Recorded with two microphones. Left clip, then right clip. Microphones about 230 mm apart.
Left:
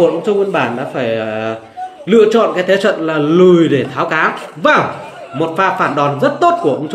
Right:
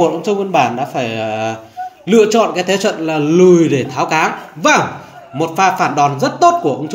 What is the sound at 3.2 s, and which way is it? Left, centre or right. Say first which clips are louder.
Mantra: even; centre.